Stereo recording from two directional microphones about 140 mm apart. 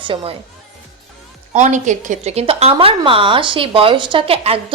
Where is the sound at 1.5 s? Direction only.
60° right (ahead or behind).